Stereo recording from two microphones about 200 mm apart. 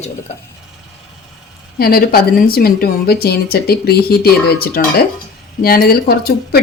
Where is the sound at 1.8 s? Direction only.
50° left (ahead or behind).